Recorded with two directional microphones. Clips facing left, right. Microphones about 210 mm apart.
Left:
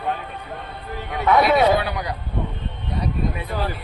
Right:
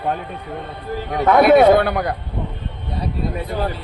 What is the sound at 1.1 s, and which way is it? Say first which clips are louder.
A man's voice: right 5 dB; 45° right (ahead or behind).